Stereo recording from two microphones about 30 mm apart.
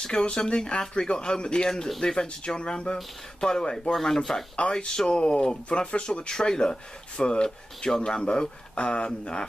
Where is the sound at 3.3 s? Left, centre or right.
Left.